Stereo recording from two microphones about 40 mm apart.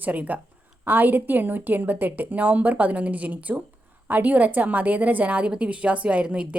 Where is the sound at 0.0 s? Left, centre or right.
Right.